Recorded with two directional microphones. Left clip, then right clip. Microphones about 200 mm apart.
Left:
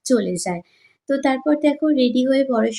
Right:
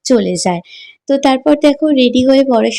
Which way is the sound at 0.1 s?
35° right (ahead or behind).